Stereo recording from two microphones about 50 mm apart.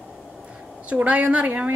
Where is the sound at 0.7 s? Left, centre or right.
Right.